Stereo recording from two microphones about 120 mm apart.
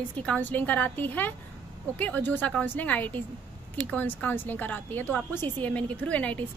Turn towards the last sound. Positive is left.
turn(degrees=10)  # may be behind; listen again after turning